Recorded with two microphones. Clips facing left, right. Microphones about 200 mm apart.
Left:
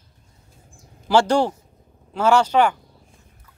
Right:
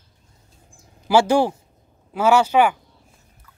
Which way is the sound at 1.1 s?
5° right (ahead or behind).